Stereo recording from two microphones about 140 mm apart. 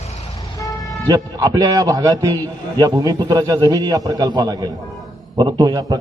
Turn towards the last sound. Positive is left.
turn(degrees=-30)  # may be behind; listen again after turning